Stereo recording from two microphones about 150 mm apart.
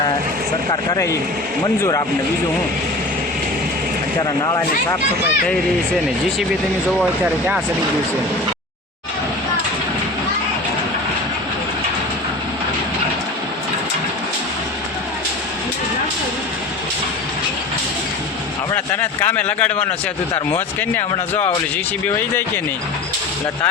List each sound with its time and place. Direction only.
0.9 s speech: 20° left (ahead or behind)
4.2 s speech: 25° left (ahead or behind)
7.0 s speech: 5° right (ahead or behind)
19.2 s speech: 10° left (ahead or behind)